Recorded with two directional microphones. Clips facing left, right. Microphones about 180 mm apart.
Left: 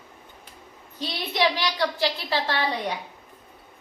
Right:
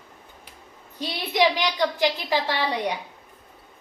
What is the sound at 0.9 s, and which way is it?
A woman's voice, 15° right (ahead or behind).